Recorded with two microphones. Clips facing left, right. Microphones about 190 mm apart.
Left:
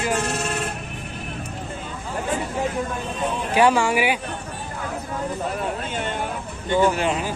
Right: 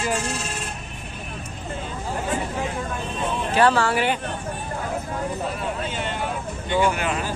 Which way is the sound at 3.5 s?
15° left (ahead or behind).